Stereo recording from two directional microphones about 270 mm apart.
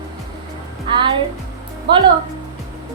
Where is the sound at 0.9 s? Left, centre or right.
Centre.